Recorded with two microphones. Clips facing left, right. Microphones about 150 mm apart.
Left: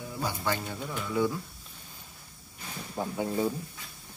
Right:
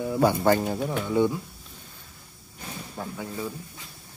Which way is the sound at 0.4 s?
45° right (ahead or behind).